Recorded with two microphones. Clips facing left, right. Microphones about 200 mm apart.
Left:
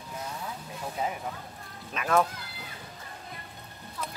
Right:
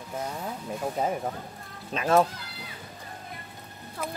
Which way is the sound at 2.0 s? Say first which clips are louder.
Right 3 dB; 30° right (ahead or behind).